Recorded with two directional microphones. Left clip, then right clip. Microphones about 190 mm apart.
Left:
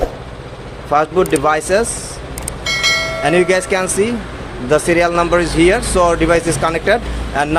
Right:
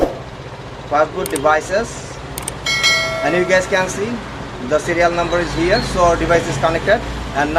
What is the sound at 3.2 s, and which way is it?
Speech, 60° left (ahead or behind).